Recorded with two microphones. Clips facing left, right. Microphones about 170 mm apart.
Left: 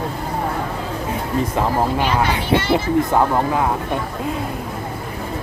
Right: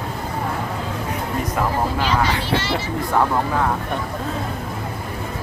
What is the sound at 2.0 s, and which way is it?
Speech, 15° left (ahead or behind).